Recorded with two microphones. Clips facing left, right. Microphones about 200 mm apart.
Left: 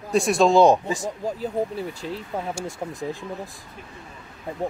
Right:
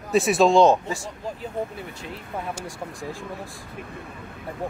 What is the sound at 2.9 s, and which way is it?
Speech, 20° left (ahead or behind).